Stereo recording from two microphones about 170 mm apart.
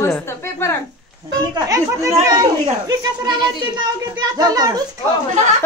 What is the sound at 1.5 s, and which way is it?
Speech, 20° right (ahead or behind).